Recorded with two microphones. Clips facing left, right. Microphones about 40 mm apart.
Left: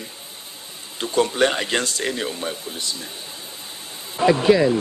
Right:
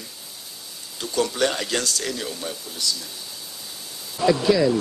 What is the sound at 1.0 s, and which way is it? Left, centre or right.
Speech, left.